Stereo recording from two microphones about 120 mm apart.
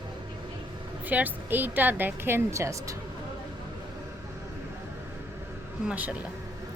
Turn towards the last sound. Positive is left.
turn(degrees=-10)  # may be behind; listen again after turning